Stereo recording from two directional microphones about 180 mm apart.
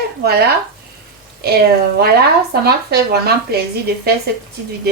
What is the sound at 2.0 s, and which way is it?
Speech, 60° right (ahead or behind).